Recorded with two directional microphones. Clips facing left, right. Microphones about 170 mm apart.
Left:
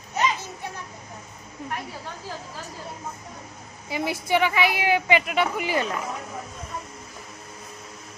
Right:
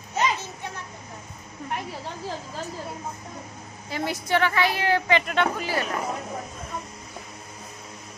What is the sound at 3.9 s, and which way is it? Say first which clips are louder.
A woman's voice: left 1 dB; 15° left (ahead or behind).